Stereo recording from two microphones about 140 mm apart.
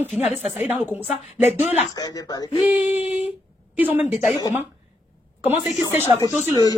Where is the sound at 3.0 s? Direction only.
50° left (ahead or behind).